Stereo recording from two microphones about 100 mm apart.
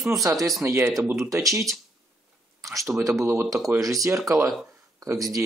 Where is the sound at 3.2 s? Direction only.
25° right (ahead or behind).